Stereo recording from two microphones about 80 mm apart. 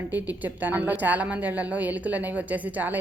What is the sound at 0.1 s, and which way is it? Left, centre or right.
A woman's voice, right.